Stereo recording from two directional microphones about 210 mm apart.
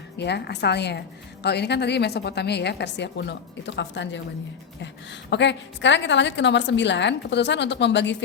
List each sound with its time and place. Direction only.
0.2 s a woman's voice: 55° left (ahead or behind)
5.3 s a woman's voice: 55° left (ahead or behind)